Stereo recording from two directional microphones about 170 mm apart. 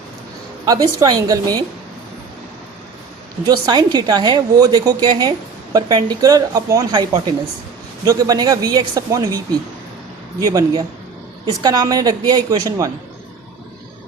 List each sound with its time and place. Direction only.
0.6 s a woman's voice: 20° right (ahead or behind)
3.4 s a woman's voice: 25° right (ahead or behind)